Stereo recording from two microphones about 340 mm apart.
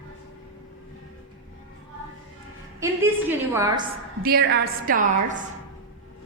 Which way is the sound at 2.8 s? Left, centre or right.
Centre.